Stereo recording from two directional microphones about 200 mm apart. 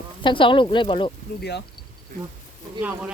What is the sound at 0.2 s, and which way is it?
Speech, 25° left (ahead or behind).